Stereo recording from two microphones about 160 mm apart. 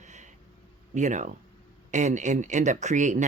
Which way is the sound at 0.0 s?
50° right (ahead or behind).